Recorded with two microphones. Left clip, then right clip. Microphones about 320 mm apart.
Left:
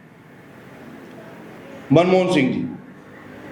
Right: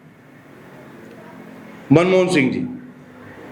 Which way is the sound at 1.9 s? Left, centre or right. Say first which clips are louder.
Right 1 dB; right.